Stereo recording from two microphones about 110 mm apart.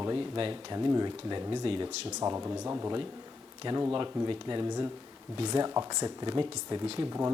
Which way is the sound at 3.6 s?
45° right (ahead or behind).